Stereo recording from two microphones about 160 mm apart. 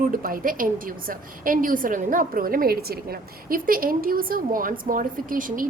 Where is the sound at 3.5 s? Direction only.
60° right (ahead or behind).